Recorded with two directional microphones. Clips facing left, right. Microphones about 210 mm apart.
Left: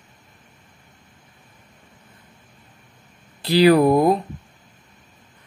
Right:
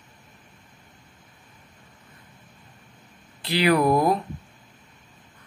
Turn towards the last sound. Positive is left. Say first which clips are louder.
# left 5 dB
turn(degrees=25)  # may be behind; listen again after turning